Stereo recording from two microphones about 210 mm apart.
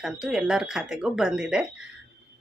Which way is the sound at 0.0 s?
5° right (ahead or behind).